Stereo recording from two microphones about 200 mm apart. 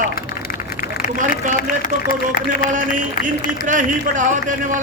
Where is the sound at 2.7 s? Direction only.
40° right (ahead or behind).